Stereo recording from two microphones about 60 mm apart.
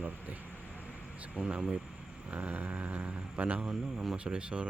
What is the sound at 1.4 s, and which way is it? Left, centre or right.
Speech, centre.